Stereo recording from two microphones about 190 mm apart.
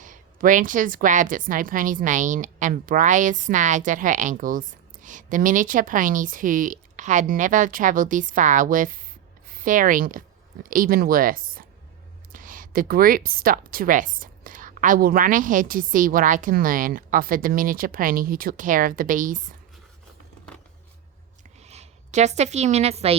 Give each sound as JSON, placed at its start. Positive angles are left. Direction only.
{"t": 0.0, "sound": "a woman's voice", "side_deg": -45}
{"t": 21.6, "sound": "a woman's voice", "side_deg": -35}